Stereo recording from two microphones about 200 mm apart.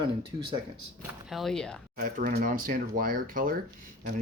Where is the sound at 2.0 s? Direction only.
45° right (ahead or behind).